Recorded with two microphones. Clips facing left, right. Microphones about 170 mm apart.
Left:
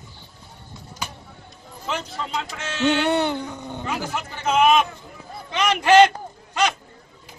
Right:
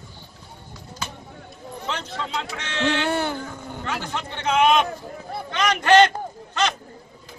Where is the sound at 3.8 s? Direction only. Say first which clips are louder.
Left 1 dB; 5° left (ahead or behind).